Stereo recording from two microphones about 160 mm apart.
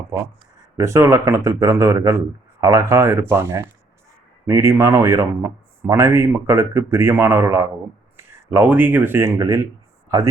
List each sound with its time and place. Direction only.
0.8 s a man's voice: 15° right (ahead or behind)